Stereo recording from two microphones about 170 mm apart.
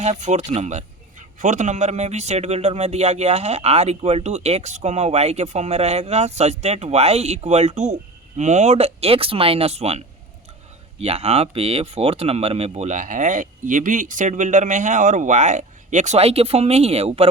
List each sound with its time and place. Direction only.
0.0 s a man's voice: 45° right (ahead or behind)
11.0 s speech: 35° right (ahead or behind)